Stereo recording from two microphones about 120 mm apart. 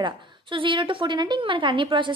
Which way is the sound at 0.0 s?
45° right (ahead or behind).